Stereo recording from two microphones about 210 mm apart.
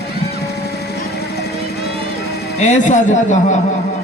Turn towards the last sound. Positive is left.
turn(degrees=35)  # may be behind; listen again after turning